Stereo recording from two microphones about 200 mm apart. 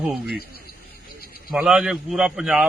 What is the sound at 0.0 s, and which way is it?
Speech, 5° right (ahead or behind).